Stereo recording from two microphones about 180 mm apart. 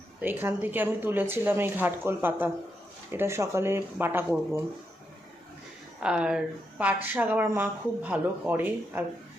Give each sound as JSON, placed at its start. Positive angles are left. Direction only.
{"t": 0.2, "sound": "a woman's voice", "side_deg": -10}
{"t": 6.0, "sound": "a woman's voice", "side_deg": -5}